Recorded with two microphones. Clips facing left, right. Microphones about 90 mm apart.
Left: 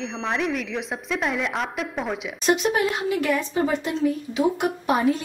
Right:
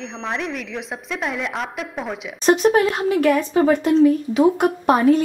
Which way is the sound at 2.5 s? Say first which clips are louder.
Right 6 dB; 45° right (ahead or behind).